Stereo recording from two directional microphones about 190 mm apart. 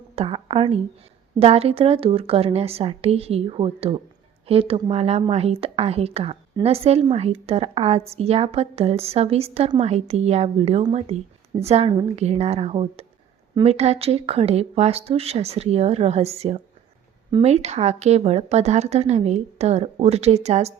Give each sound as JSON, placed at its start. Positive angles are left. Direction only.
{"t": 0.2, "sound": "a woman's voice", "side_deg": -25}